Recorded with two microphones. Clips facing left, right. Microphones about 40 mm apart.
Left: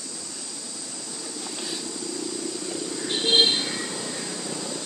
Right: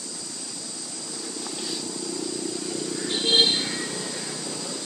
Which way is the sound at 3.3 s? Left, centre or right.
Centre.